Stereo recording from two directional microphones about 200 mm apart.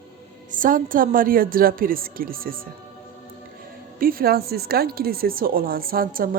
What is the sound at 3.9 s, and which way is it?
Speech, 45° right (ahead or behind).